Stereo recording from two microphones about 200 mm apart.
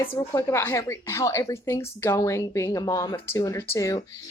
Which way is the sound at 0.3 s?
15° left (ahead or behind).